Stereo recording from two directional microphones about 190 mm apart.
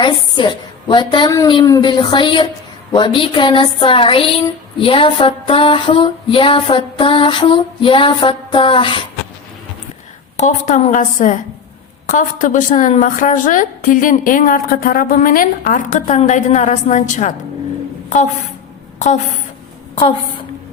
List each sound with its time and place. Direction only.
0.0 s a sound: 25° left (ahead or behind)
10.3 s a woman's voice: 40° left (ahead or behind)
18.9 s a woman's voice: 40° left (ahead or behind)